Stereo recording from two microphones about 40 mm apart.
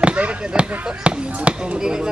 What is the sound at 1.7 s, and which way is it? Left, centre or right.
Chop, centre.